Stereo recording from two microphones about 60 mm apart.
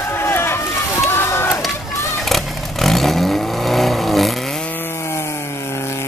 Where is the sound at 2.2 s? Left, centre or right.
Centre.